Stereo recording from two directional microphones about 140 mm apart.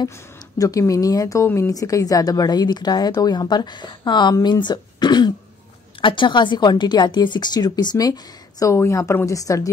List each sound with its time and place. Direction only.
0.6 s a woman's voice: 25° left (ahead or behind)